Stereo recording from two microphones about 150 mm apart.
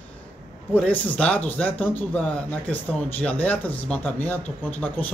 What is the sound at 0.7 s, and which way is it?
Speech, 10° left (ahead or behind).